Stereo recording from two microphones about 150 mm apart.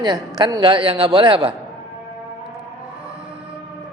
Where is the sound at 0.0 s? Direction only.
25° right (ahead or behind).